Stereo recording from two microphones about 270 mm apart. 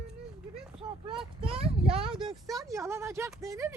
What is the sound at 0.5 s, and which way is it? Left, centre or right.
Vehicle, centre.